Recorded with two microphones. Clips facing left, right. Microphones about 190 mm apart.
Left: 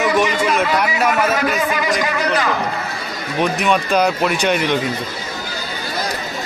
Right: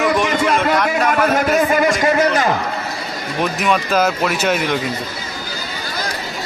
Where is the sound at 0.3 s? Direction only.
55° right (ahead or behind).